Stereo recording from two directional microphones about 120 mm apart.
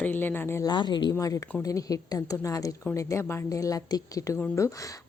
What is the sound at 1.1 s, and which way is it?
A woman's voice, 25° left (ahead or behind).